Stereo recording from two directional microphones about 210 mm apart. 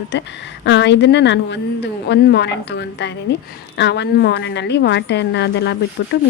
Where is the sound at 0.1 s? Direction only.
55° left (ahead or behind).